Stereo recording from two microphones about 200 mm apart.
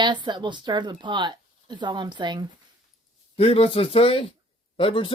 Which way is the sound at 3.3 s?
30° left (ahead or behind).